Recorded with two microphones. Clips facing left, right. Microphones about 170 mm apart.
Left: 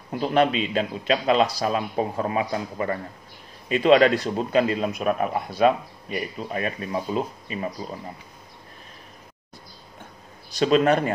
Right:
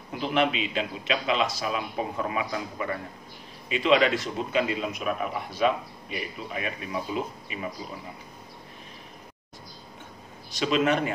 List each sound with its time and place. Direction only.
0.2 s a man's voice: 40° left (ahead or behind)
10.6 s speech: 40° left (ahead or behind)